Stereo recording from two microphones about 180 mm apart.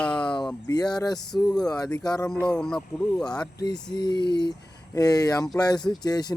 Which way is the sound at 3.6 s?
25° left (ahead or behind).